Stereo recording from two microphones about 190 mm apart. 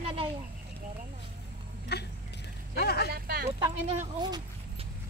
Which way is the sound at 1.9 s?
60° left (ahead or behind).